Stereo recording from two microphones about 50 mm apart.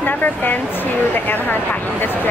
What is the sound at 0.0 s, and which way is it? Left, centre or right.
Speech, left.